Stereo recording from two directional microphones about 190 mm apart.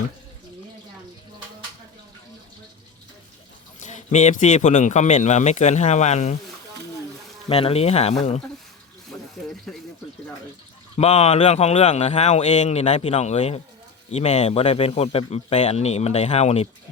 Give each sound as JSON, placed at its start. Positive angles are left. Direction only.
{"t": 3.8, "sound": "speech", "side_deg": 40}
{"t": 7.4, "sound": "speech", "side_deg": 30}
{"t": 9.0, "sound": "water", "side_deg": 0}
{"t": 10.9, "sound": "speech", "side_deg": 35}